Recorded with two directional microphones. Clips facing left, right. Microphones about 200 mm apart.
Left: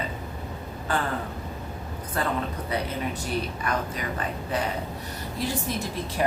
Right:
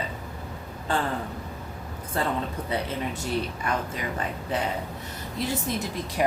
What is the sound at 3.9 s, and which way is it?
A woman's voice, 25° right (ahead or behind).